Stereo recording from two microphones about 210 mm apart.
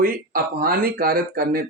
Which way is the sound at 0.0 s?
45° right (ahead or behind).